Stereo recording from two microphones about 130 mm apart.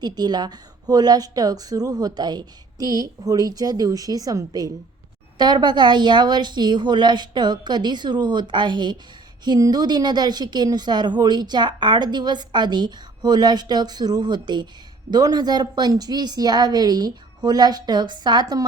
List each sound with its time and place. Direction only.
0.0 s a woman's voice: 30° right (ahead or behind)